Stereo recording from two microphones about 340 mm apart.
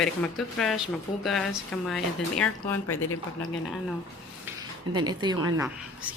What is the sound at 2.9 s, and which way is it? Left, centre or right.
Speech, left.